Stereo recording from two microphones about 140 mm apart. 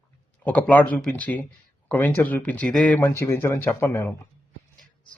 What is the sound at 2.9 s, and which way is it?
Speech, 15° left (ahead or behind).